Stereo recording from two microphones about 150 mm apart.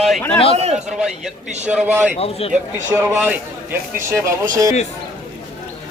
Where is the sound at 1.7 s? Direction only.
10° right (ahead or behind).